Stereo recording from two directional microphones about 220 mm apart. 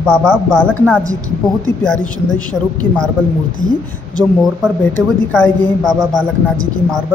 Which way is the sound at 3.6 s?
35° left (ahead or behind).